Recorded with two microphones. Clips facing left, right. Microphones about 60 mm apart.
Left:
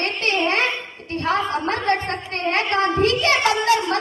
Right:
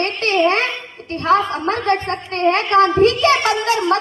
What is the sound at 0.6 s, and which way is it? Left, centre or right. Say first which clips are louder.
Speech: even; left.